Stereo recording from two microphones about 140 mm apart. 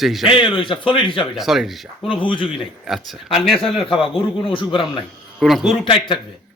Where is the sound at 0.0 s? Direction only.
Centre (ahead or behind).